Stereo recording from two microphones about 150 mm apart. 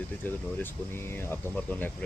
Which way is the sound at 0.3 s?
15° left (ahead or behind).